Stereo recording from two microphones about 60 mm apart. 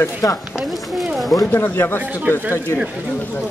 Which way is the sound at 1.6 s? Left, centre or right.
Left.